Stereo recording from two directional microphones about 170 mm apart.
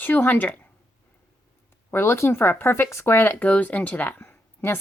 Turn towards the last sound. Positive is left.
turn(degrees=15)  # may be behind; listen again after turning